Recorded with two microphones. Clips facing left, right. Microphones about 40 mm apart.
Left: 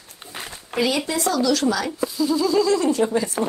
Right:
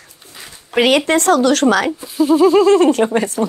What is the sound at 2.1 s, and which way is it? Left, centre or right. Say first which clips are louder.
Speech: right 9 dB; right.